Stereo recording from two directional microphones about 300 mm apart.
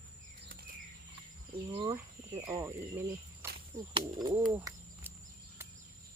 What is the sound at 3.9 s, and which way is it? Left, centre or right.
Speech, centre.